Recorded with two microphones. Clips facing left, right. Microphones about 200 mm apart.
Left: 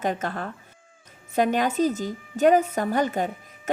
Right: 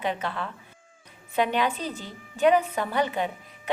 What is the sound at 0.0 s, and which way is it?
Speech, 45° left (ahead or behind).